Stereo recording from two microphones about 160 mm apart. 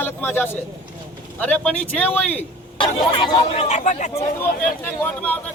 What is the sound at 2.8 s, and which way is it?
Speech, 35° left (ahead or behind).